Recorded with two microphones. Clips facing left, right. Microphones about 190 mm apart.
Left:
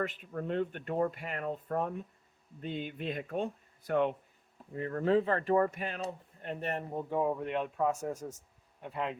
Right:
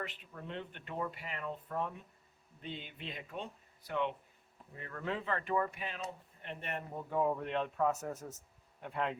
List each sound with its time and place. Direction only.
0.0 s speech: 50° left (ahead or behind)
4.7 s speech: 40° left (ahead or behind)
7.1 s a man's voice: 15° left (ahead or behind)